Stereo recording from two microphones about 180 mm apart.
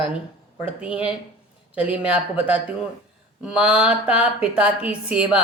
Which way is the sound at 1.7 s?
5° right (ahead or behind).